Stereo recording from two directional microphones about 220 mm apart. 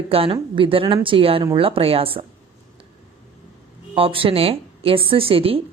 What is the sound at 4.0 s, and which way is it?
Speech, 25° right (ahead or behind).